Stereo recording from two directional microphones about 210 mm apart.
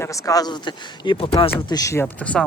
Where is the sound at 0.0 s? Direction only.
15° left (ahead or behind).